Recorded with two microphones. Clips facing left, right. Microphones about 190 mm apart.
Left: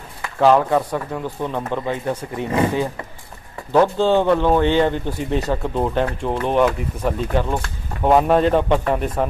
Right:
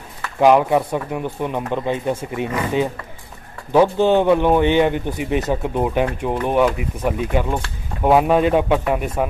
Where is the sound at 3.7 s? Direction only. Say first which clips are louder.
Right 1 dB; 15° right (ahead or behind).